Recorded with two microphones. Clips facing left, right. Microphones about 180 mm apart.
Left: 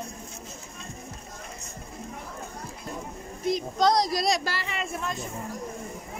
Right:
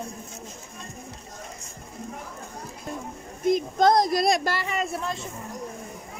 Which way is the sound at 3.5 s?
50° right (ahead or behind).